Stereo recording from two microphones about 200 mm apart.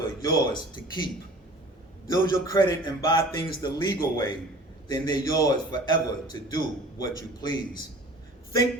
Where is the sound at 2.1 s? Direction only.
20° left (ahead or behind).